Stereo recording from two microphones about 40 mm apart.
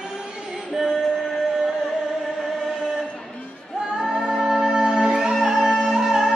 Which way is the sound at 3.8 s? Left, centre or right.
Centre.